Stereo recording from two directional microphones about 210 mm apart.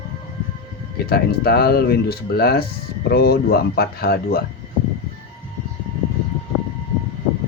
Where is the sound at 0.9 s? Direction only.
50° left (ahead or behind).